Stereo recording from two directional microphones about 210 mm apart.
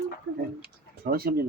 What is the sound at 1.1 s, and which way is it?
Speech, 45° right (ahead or behind).